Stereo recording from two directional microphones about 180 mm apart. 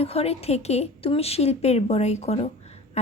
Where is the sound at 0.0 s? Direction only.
35° left (ahead or behind).